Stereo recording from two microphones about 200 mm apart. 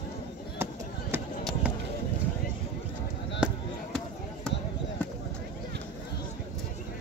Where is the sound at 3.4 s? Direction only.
5° right (ahead or behind).